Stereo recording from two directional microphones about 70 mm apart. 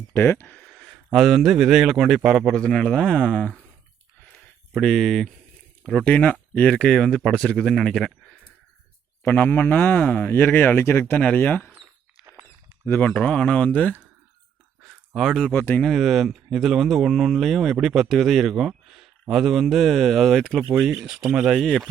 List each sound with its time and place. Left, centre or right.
0.1 s speech: left
0.6 s speech: centre
2.6 s a man's voice: centre
4.7 s speech: centre
6.1 s a man's voice: left
9.2 s speech: left
11.1 s speech: centre
12.8 s speech: left
13.1 s a man's voice: centre
14.8 s a sound: centre
15.5 s speech: left
15.8 s speech: centre
20.7 s speech: centre
21.6 s speech: centre